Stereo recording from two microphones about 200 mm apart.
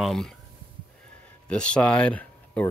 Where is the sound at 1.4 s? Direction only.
5° left (ahead or behind).